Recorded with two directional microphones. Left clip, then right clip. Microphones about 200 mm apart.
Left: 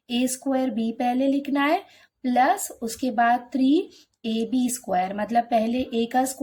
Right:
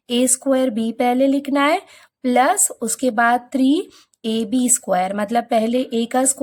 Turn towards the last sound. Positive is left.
turn(degrees=-35)  # may be behind; listen again after turning